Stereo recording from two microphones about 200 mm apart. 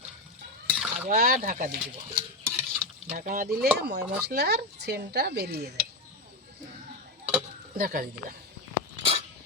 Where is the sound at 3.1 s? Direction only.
45° right (ahead or behind).